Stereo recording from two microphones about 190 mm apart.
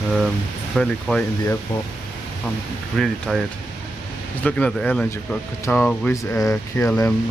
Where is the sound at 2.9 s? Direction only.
Centre (ahead or behind).